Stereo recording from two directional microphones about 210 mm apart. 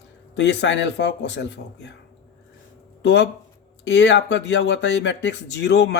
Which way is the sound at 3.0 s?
55° left (ahead or behind).